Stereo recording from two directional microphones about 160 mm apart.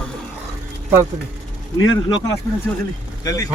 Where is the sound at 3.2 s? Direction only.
20° left (ahead or behind).